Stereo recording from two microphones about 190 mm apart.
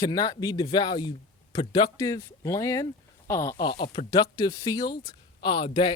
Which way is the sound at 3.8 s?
30° left (ahead or behind).